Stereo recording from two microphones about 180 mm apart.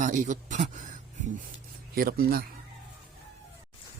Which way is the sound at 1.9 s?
55° right (ahead or behind).